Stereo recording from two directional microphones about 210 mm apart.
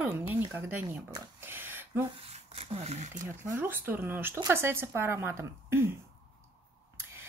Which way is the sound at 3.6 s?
10° right (ahead or behind).